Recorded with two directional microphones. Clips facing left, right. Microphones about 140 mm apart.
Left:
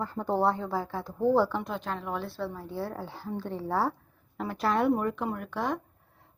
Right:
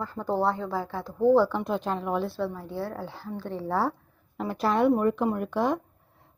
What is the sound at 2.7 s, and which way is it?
A woman's voice, 15° left (ahead or behind).